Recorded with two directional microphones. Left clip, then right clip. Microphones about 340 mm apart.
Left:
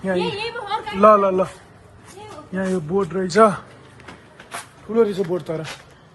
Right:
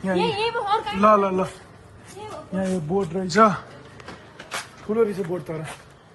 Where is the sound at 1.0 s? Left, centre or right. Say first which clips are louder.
Left 6 dB; centre.